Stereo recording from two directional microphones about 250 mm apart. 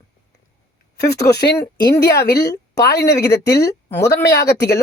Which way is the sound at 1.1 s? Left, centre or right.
Left.